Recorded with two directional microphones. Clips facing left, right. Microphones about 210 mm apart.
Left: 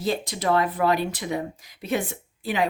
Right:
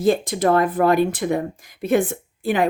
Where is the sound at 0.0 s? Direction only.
50° right (ahead or behind).